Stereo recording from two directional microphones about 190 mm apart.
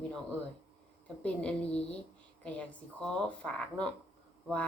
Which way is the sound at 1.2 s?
5° left (ahead or behind).